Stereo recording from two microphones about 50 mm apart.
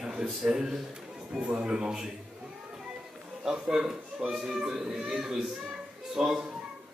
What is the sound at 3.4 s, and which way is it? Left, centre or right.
A child's voice, centre.